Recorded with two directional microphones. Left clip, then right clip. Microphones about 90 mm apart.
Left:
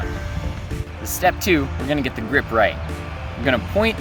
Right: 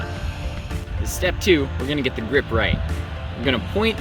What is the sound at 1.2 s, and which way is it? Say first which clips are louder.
Speech: left 1 dB; 65° left (ahead or behind).